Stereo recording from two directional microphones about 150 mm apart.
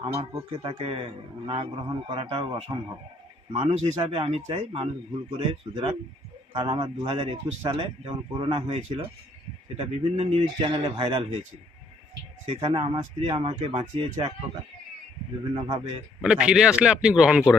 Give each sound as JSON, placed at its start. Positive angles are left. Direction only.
{"t": 0.0, "sound": "a man's voice", "side_deg": -30}
{"t": 12.5, "sound": "speech", "side_deg": -35}
{"t": 15.5, "sound": "a man's voice", "side_deg": -30}
{"t": 16.2, "sound": "a man's voice", "side_deg": -5}